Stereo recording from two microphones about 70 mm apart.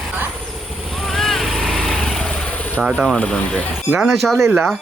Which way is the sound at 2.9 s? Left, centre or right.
Centre.